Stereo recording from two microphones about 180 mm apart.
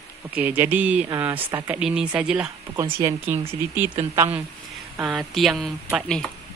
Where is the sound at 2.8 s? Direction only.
15° right (ahead or behind).